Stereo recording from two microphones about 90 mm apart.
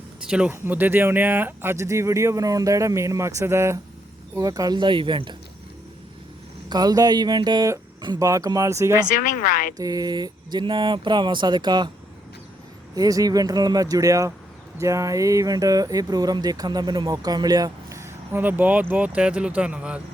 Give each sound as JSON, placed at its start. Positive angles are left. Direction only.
{"t": 0.3, "sound": "speech", "side_deg": -10}
{"t": 0.5, "sound": "speech", "side_deg": -25}
{"t": 4.4, "sound": "speech", "side_deg": -40}
{"t": 4.8, "sound": "speech", "side_deg": -65}
{"t": 6.7, "sound": "speech", "side_deg": -45}
{"t": 8.2, "sound": "speech", "side_deg": -40}
{"t": 9.7, "sound": "speech", "side_deg": -45}
{"t": 13.0, "sound": "speech", "side_deg": -40}